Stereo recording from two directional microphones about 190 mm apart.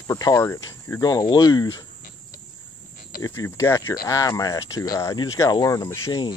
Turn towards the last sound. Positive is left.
turn(degrees=20)  # may be behind; listen again after turning